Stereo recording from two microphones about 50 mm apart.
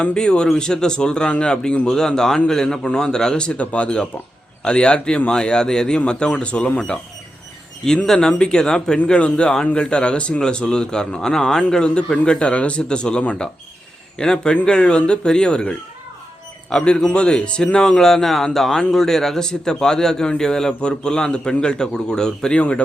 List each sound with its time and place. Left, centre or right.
0.0 s a man's voice: centre